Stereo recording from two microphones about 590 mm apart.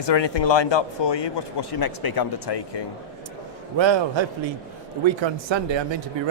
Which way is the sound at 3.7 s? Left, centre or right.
Right.